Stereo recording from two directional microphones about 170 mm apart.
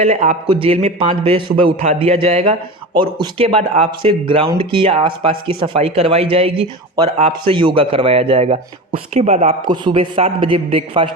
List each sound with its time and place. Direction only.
0.0 s a man's voice: 40° right (ahead or behind)
9.6 s a man's voice: 30° right (ahead or behind)